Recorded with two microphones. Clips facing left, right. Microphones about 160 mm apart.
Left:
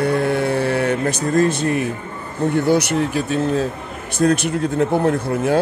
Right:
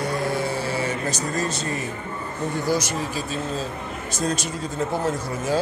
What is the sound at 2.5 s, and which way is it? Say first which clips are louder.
Speech: left 8 dB; 60° left (ahead or behind).